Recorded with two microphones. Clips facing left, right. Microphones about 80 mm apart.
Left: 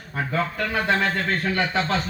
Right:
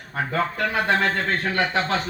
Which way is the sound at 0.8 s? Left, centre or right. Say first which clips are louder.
Even; right.